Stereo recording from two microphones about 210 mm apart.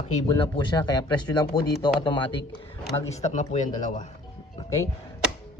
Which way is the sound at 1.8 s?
20° left (ahead or behind).